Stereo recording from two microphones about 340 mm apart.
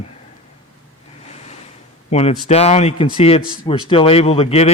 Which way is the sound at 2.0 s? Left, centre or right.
Centre.